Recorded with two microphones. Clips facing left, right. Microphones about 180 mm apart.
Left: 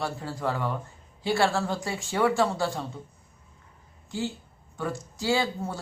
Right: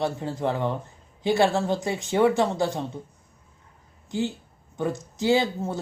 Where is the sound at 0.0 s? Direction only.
20° right (ahead or behind).